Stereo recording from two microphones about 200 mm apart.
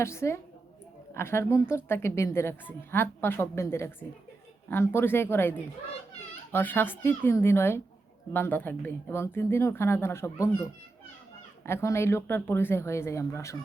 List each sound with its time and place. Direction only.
0.0 s speech: 15° left (ahead or behind)